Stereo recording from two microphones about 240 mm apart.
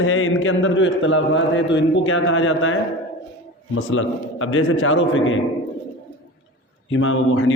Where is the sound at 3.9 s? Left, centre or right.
Left.